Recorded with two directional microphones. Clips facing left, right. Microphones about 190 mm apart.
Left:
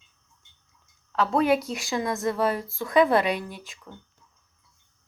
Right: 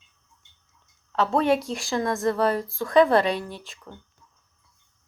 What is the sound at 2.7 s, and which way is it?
Speech, 20° left (ahead or behind).